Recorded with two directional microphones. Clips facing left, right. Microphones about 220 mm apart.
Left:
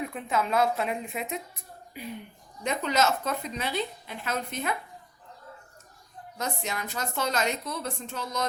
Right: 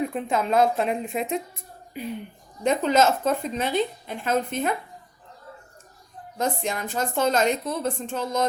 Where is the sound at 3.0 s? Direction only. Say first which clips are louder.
Right 5 dB; 30° right (ahead or behind).